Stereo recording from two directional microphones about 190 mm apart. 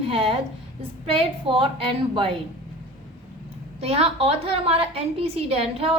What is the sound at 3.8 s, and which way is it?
A woman's voice, 30° right (ahead or behind).